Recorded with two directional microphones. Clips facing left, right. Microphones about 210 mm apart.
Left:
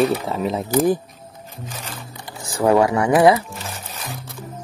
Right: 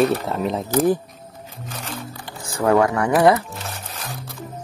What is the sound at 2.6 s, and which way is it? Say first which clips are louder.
Speech: left 1 dB; 15° left (ahead or behind).